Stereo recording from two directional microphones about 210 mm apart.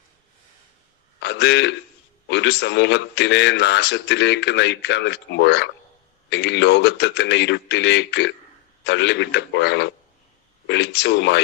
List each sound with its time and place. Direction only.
1.2 s a man's voice: 55° left (ahead or behind)